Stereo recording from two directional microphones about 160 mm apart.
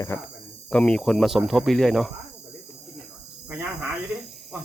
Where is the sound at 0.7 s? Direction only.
5° left (ahead or behind).